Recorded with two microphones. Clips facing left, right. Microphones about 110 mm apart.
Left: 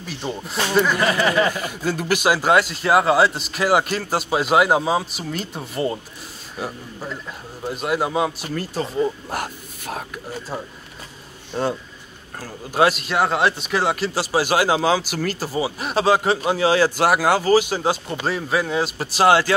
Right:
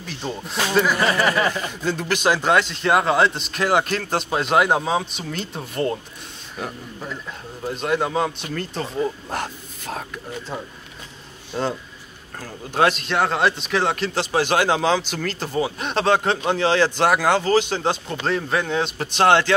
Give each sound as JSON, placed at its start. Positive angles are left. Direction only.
{"t": 0.0, "sound": "speech", "side_deg": 5}
{"t": 12.4, "sound": "speech", "side_deg": 10}